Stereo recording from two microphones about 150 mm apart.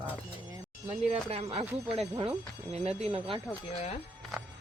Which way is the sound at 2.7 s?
40° right (ahead or behind).